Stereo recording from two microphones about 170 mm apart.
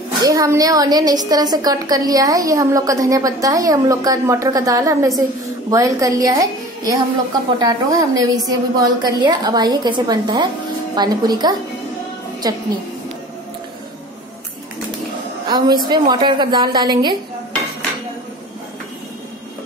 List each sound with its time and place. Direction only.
0.2 s a woman's voice: 20° right (ahead or behind)
15.4 s a woman's voice: 25° right (ahead or behind)